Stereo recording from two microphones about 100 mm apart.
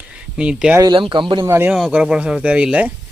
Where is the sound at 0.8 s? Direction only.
55° right (ahead or behind).